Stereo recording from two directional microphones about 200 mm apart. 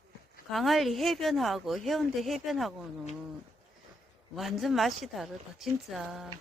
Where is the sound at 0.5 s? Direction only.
Centre (ahead or behind).